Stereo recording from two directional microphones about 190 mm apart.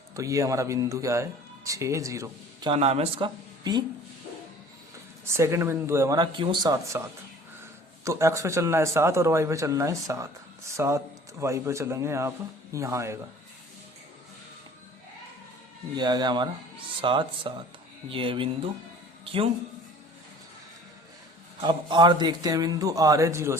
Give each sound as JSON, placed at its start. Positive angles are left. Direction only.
{"t": 0.2, "sound": "speech", "side_deg": -15}
{"t": 5.4, "sound": "speech", "side_deg": -15}
{"t": 16.0, "sound": "a man's voice", "side_deg": -20}
{"t": 21.6, "sound": "a man's voice", "side_deg": -25}